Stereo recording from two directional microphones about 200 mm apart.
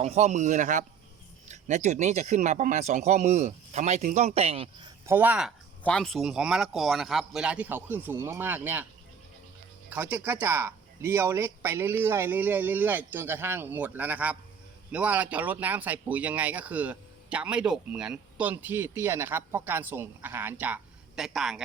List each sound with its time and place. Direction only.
0.0 s speech: 35° right (ahead or behind)
5.0 s speech: 10° right (ahead or behind)
5.8 s speech: 5° left (ahead or behind)
9.9 s speech: 10° right (ahead or behind)